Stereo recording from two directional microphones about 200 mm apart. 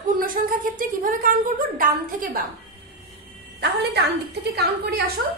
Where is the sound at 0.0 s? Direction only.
45° right (ahead or behind).